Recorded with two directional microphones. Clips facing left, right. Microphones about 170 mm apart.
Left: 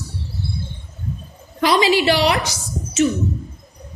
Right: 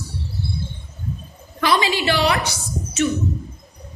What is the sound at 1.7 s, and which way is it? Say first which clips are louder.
Speech: left 4 dB; 30° left (ahead or behind).